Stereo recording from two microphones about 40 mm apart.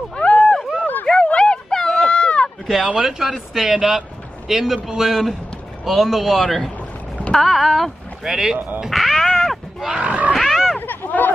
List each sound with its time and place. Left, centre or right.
0.1 s a sound: left
1.7 s a sound: centre
2.0 s run: left
3.0 s speech: centre
8.2 s speech: centre
8.5 s speech: right
8.9 s cat: centre
9.9 s wild animals: right
10.3 s pig: centre
10.8 s hubbub: left
11.1 s a sound: left